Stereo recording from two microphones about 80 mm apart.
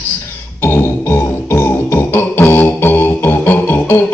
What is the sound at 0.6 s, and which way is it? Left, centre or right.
Music, left.